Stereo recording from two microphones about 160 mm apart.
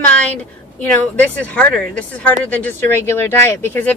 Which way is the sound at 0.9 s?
10° left (ahead or behind).